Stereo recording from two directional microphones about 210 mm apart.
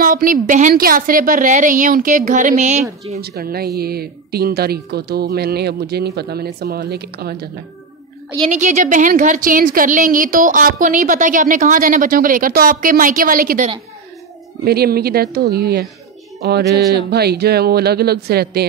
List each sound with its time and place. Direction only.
0.0 s a woman's voice: 40° right (ahead or behind)
3.2 s speech: 50° right (ahead or behind)
8.5 s a woman's voice: 35° right (ahead or behind)